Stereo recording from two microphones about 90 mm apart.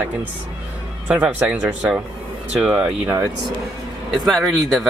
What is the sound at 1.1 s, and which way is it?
Speech, 15° right (ahead or behind).